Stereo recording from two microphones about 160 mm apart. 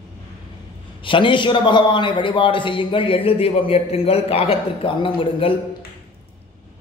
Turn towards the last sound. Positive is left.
turn(degrees=30)  # may be behind; listen again after turning